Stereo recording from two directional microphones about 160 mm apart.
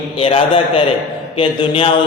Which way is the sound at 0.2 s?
35° left (ahead or behind).